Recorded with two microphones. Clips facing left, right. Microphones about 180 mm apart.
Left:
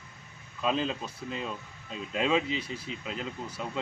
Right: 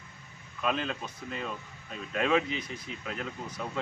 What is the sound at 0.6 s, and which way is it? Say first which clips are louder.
Speech: left 2 dB; 25° left (ahead or behind).